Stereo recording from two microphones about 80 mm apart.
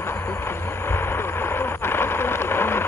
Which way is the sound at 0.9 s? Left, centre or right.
Left.